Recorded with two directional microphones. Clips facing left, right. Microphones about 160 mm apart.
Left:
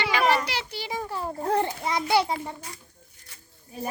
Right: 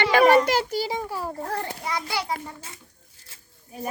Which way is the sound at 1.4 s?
20° left (ahead or behind).